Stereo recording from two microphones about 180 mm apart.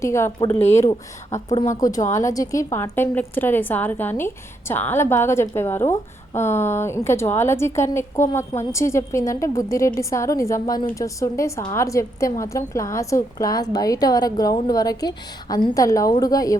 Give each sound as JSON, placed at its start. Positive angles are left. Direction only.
{"t": 0.0, "sound": "a woman's voice", "side_deg": 15}